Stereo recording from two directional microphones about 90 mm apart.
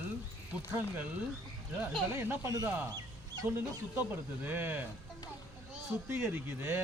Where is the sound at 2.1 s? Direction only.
25° right (ahead or behind).